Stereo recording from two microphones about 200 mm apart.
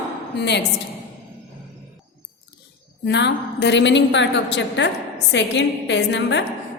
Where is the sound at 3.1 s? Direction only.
60° left (ahead or behind).